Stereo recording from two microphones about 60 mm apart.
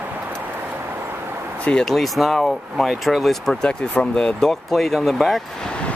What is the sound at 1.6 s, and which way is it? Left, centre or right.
Speech, centre.